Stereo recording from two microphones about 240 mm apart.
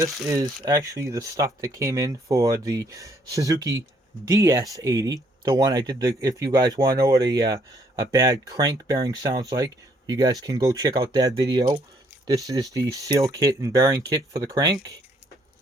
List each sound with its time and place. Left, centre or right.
0.3 s speech: centre